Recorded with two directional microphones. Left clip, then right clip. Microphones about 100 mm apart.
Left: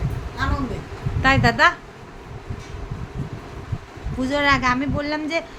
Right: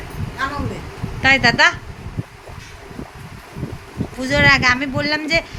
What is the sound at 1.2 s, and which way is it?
Speech, 15° left (ahead or behind).